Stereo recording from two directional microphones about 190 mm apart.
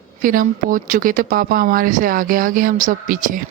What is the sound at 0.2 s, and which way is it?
Speech, 45° right (ahead or behind).